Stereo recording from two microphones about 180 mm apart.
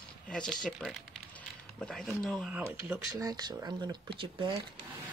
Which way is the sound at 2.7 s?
10° right (ahead or behind).